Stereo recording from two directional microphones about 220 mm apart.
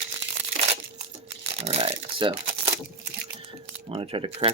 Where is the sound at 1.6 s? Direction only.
25° right (ahead or behind).